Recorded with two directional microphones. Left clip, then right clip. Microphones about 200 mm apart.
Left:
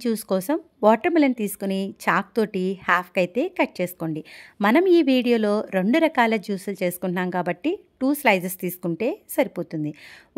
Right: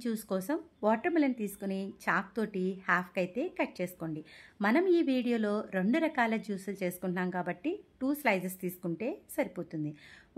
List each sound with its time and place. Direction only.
0.0 s speech: 45° left (ahead or behind)